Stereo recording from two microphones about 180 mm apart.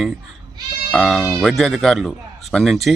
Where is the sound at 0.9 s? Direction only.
Centre (ahead or behind).